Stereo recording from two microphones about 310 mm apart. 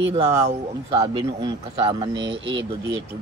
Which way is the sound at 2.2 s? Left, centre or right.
Right.